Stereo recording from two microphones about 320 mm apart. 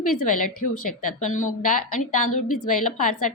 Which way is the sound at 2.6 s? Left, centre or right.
Left.